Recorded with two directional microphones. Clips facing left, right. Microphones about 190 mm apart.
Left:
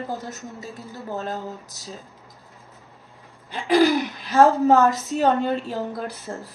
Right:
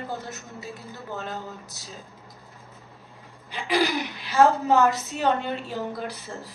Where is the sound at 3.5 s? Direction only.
45° left (ahead or behind).